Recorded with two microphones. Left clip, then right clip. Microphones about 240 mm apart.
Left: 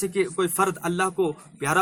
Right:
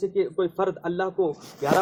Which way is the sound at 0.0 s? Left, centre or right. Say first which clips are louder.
Even; left.